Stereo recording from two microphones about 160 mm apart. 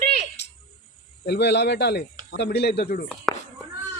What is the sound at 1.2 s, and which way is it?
Speech, 90° left.